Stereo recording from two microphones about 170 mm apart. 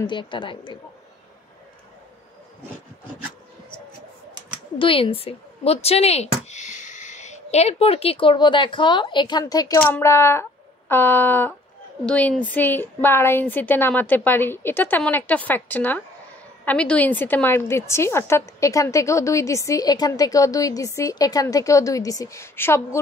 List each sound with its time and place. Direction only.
0.0 s a woman's voice: 25° left (ahead or behind)
4.7 s speech: 30° left (ahead or behind)
9.8 s a woman's voice: 10° left (ahead or behind)